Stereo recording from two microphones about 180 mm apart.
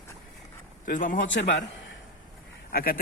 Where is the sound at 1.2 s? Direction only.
90° left.